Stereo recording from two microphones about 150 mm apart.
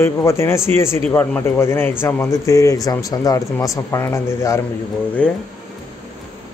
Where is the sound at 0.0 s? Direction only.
20° left (ahead or behind).